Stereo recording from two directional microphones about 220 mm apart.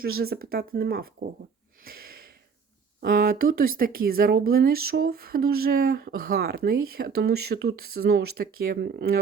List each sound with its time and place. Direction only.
0.2 s speech: 45° right (ahead or behind)
3.0 s speech: 40° right (ahead or behind)